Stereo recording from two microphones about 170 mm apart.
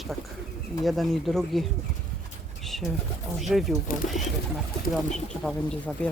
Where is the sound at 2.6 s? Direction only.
Centre (ahead or behind).